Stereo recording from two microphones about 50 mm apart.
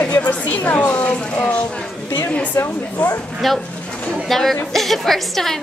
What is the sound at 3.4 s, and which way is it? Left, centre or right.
A woman's voice, centre.